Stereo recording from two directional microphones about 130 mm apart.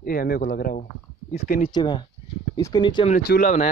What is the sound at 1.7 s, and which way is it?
Speech, 35° left (ahead or behind).